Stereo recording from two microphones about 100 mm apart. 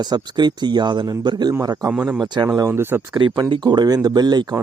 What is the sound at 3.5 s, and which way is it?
Speech, 45° right (ahead or behind).